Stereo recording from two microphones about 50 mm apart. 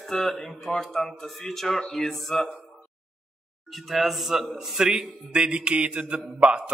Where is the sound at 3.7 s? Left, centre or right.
Centre.